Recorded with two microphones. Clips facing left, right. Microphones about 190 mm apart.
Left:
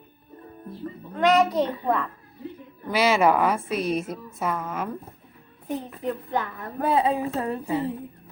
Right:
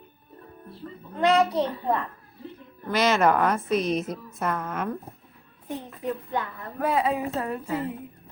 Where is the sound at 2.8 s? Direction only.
10° left (ahead or behind).